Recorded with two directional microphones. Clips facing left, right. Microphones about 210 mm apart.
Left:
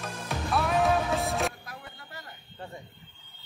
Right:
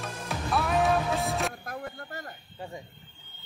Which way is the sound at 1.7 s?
50° right (ahead or behind).